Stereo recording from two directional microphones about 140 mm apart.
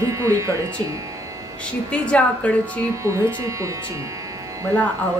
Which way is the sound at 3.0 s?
20° right (ahead or behind).